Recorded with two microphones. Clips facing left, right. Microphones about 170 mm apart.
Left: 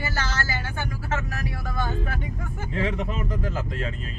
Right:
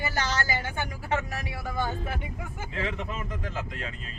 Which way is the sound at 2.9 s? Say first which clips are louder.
Left 6 dB; 40° left (ahead or behind).